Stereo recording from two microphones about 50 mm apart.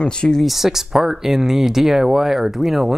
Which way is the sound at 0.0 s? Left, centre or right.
Centre.